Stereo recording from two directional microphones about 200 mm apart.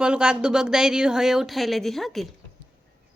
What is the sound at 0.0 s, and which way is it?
Speech, 5° right (ahead or behind).